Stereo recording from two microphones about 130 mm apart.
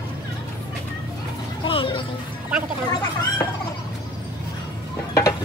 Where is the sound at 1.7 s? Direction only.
40° left (ahead or behind).